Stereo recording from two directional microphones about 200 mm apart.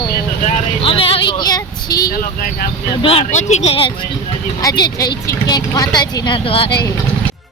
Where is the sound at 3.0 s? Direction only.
30° left (ahead or behind).